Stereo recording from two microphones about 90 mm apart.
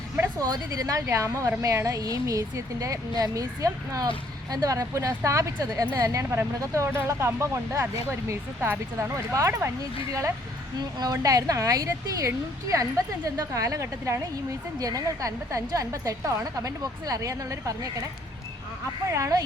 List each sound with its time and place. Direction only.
0.3 s a woman's voice: 45° right (ahead or behind)
10.8 s a woman's voice: 45° right (ahead or behind)
19.1 s a woman's voice: 35° right (ahead or behind)